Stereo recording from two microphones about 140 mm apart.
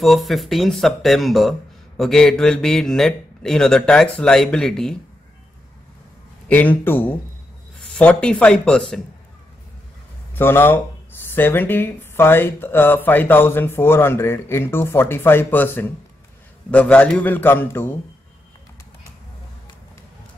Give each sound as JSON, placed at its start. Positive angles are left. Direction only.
{"t": 0.0, "sound": "a man's voice", "side_deg": 0}
{"t": 6.5, "sound": "speech", "side_deg": 10}
{"t": 10.3, "sound": "speech", "side_deg": 15}